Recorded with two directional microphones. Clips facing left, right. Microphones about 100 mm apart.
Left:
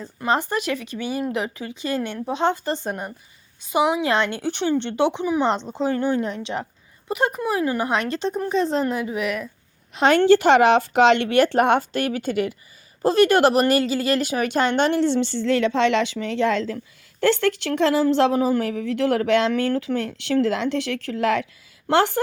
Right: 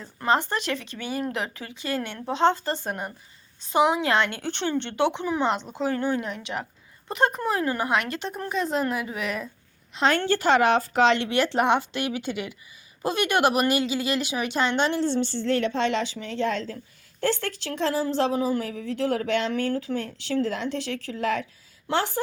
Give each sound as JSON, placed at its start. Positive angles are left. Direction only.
{"t": 0.0, "sound": "speech", "side_deg": 15}
{"t": 3.7, "sound": "speech", "side_deg": 10}
{"t": 7.1, "sound": "speech", "side_deg": 10}
{"t": 7.9, "sound": "speech", "side_deg": 25}
{"t": 9.9, "sound": "a woman's voice", "side_deg": 75}
{"t": 15.0, "sound": "a woman's voice", "side_deg": 90}
{"t": 21.8, "sound": "a woman's voice", "side_deg": 65}